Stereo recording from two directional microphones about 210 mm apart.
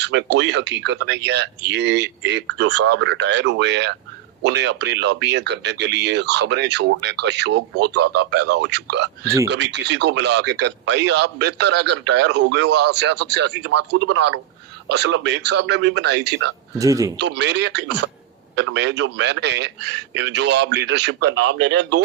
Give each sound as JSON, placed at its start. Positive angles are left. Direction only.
{"t": 0.0, "sound": "speech", "side_deg": -55}
{"t": 16.7, "sound": "speech", "side_deg": -15}
{"t": 17.2, "sound": "speech", "side_deg": -55}